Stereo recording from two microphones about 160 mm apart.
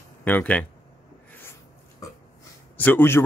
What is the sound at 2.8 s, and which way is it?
Speech, 10° left (ahead or behind).